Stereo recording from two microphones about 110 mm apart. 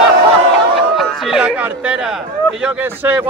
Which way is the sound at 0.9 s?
Centre (ahead or behind).